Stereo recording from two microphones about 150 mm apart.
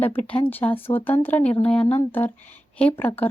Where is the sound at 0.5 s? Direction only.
10° left (ahead or behind).